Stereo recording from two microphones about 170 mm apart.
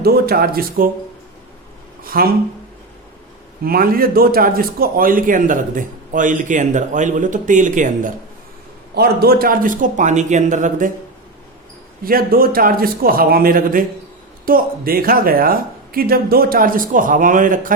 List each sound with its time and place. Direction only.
0.0 s speech: 65° right (ahead or behind)
2.0 s speech: 60° right (ahead or behind)
3.6 s a man's voice: 60° right (ahead or behind)
9.0 s a man's voice: 65° right (ahead or behind); by 10.9 s 50° right (ahead or behind)
12.0 s speech: 60° right (ahead or behind)